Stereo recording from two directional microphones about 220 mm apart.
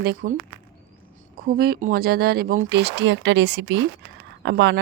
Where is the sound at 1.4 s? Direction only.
45° right (ahead or behind).